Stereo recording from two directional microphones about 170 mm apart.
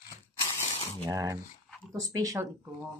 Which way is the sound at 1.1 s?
20° right (ahead or behind).